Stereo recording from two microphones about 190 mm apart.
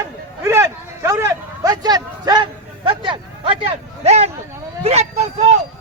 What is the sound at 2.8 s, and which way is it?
A man's voice, 25° right (ahead or behind).